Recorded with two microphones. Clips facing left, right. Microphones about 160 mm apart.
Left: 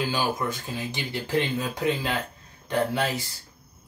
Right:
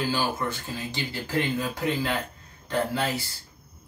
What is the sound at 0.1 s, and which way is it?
Speech, 15° left (ahead or behind).